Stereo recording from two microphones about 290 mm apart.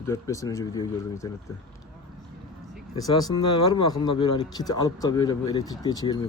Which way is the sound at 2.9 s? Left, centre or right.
Centre.